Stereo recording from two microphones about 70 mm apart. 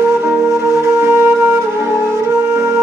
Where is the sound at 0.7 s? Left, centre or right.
Right.